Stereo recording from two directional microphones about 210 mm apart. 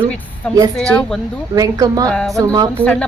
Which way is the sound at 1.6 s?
15° right (ahead or behind).